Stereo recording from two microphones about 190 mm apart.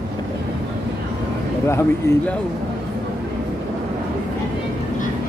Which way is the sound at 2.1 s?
15° left (ahead or behind).